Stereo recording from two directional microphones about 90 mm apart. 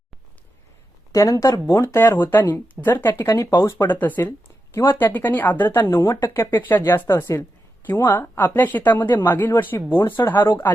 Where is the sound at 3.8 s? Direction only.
20° left (ahead or behind).